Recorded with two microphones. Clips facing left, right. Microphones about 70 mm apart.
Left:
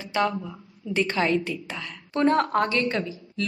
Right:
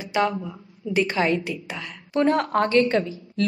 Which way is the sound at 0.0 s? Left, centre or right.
Centre.